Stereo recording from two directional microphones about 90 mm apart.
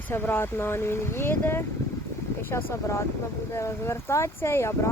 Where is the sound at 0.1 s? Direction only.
25° left (ahead or behind).